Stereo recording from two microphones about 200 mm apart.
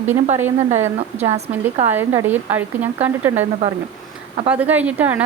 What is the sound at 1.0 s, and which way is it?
Speech, 30° right (ahead or behind).